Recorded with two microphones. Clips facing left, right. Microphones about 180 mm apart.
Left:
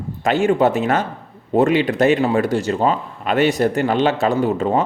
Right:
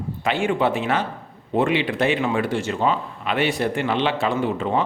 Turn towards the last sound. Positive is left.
turn(degrees=40)  # may be behind; listen again after turning